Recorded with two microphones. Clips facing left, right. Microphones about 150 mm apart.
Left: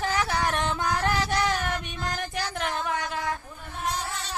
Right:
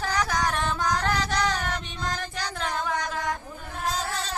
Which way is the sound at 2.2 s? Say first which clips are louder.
Left 2 dB; 20° left (ahead or behind).